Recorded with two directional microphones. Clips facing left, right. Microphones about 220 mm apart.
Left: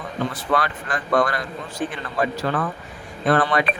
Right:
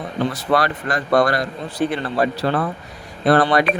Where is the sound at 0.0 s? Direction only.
35° right (ahead or behind).